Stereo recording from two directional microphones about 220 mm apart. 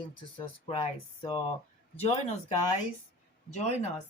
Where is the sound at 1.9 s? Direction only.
30° left (ahead or behind).